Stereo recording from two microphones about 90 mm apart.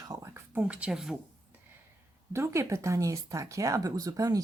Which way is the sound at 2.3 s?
30° right (ahead or behind).